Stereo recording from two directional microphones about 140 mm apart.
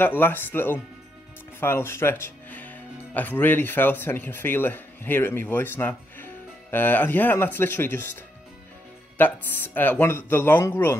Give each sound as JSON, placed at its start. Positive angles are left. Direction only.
{"t": 0.0, "sound": "speech", "side_deg": 15}
{"t": 9.2, "sound": "speech", "side_deg": 15}